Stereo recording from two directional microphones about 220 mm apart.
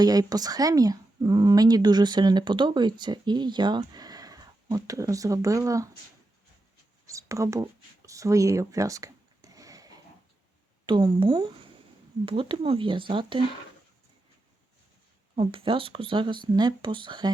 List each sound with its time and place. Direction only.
0.0 s speech: 15° right (ahead or behind)
7.1 s a sound: 15° right (ahead or behind)
10.8 s speech: 20° right (ahead or behind)
15.4 s speech: 25° right (ahead or behind)